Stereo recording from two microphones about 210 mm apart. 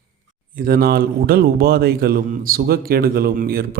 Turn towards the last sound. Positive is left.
turn(degrees=-45)  # may be behind; listen again after turning